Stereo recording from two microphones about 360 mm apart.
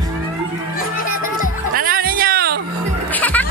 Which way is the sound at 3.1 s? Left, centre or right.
Centre.